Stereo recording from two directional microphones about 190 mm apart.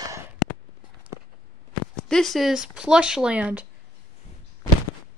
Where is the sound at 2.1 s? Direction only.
Centre (ahead or behind).